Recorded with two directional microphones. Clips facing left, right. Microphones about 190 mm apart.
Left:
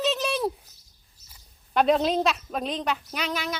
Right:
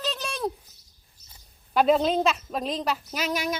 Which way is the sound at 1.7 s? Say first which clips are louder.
Right 1 dB; centre (ahead or behind).